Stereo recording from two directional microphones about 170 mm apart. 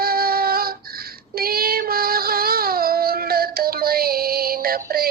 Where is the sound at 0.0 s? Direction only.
60° right (ahead or behind).